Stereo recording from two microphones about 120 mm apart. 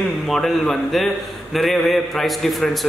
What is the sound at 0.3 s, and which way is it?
A man's voice, centre (ahead or behind).